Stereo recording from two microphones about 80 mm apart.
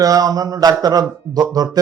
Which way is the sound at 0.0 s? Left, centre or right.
Right.